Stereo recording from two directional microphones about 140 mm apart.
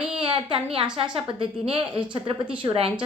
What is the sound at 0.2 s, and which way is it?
A woman's voice, 40° right (ahead or behind).